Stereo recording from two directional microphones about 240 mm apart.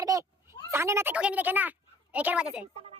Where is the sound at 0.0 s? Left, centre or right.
Centre.